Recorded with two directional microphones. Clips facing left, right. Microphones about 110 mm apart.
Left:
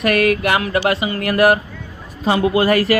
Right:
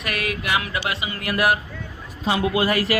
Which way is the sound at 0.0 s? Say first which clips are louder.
Left 12 dB; 55° left (ahead or behind).